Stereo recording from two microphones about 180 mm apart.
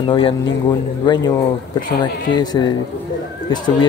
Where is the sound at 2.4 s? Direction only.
25° left (ahead or behind).